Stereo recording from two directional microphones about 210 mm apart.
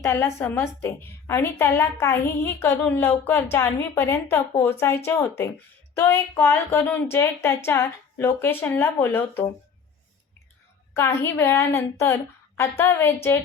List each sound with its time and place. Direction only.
0.0 s a woman's voice: 15° left (ahead or behind)
10.9 s a woman's voice: 10° left (ahead or behind)